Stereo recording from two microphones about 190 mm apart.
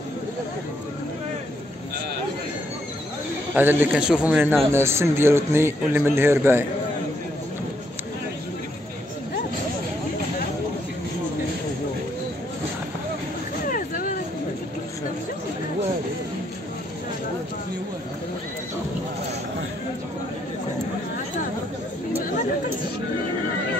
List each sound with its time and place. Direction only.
3.5 s a man's voice: 10° right (ahead or behind)
13.7 s vehicle: 45° left (ahead or behind)